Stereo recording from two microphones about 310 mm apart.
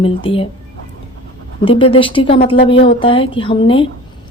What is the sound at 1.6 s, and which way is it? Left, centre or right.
A woman's voice, centre.